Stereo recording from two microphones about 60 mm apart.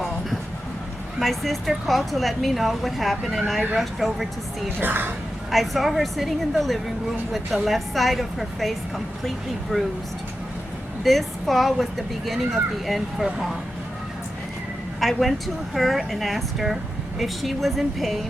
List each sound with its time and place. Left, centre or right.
1.2 s speech: centre
4.8 s speech: right
5.5 s speech: centre
9.7 s speech: centre
11.0 s speech: centre
15.0 s speech: centre